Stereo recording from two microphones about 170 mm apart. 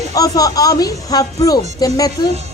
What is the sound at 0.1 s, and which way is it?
A woman's voice, 20° left (ahead or behind).